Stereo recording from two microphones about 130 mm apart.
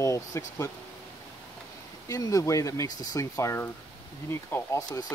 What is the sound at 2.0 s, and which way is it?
Speech, 25° left (ahead or behind).